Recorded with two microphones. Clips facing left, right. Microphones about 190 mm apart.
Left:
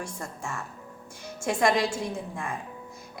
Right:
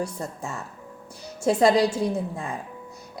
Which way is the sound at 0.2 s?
20° right (ahead or behind).